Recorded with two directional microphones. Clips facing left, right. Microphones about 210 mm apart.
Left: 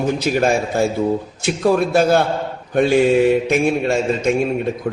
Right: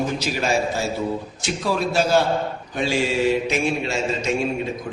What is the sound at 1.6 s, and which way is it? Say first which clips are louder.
A man's voice: left 7 dB; 55° left (ahead or behind).